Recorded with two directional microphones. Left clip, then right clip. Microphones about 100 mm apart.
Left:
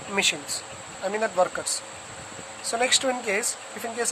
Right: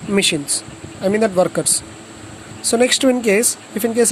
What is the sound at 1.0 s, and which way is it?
Speech, 90° right.